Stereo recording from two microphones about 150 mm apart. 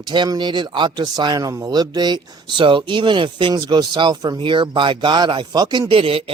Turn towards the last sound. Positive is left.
turn(degrees=-40)  # may be behind; listen again after turning